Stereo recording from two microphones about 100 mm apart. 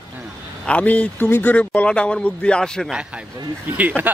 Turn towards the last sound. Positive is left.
turn(degrees=-15)  # may be behind; listen again after turning